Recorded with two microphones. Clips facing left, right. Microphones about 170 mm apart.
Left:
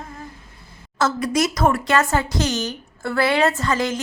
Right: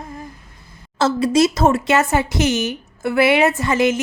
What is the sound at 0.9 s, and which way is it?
Speech, 30° right (ahead or behind).